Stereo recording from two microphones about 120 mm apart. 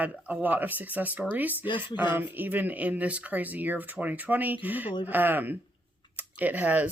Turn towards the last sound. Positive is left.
turn(degrees=-15)  # may be behind; listen again after turning